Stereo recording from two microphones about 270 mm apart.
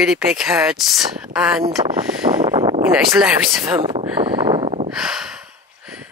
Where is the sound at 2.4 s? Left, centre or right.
Centre.